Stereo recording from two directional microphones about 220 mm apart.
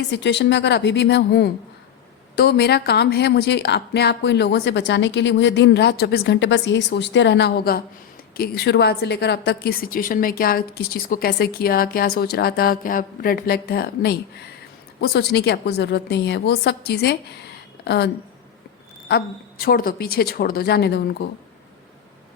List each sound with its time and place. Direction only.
0.1 s a woman's voice: 50° left (ahead or behind)